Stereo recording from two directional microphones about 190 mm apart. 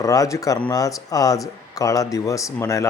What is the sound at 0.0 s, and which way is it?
Speech, 15° left (ahead or behind).